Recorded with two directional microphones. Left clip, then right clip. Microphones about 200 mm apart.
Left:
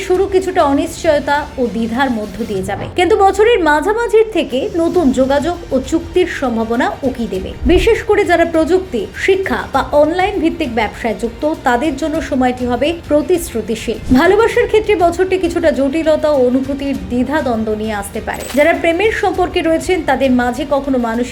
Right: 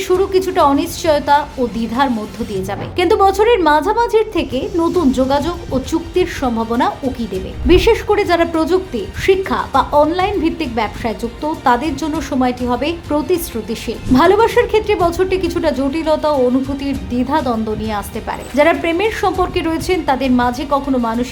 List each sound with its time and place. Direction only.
0.3 s a woman's voice: 5° right (ahead or behind)
2.6 s a woman's voice: 5° left (ahead or behind)